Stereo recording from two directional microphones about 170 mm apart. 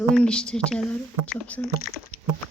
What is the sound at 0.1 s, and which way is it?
Speech, 5° left (ahead or behind).